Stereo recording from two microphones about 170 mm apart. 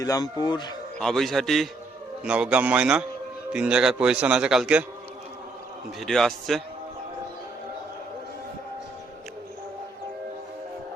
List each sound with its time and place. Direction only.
0.0 s speech: 20° left (ahead or behind)
0.9 s a man's voice: 5° left (ahead or behind)
6.0 s a man's voice: centre (ahead or behind)